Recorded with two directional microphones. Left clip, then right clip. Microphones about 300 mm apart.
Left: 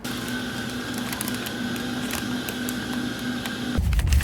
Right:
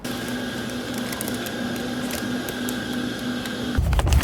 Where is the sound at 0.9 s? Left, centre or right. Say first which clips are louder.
Right 1 dB; centre.